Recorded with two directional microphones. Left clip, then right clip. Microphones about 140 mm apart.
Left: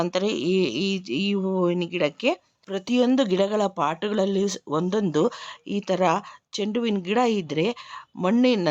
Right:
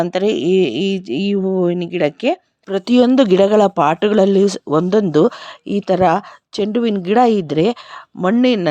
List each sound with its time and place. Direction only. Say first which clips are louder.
0.0 s speech: right 8 dB; 30° right (ahead or behind)
2.6 s speech: right 9 dB; 45° right (ahead or behind)